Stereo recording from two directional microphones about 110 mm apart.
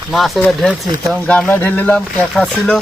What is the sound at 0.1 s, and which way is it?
Speech, centre (ahead or behind).